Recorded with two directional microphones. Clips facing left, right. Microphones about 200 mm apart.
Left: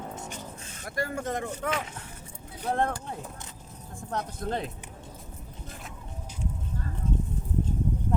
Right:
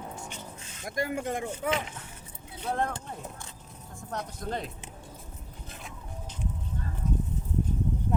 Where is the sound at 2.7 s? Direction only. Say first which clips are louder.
Left 3 dB; 50° left (ahead or behind).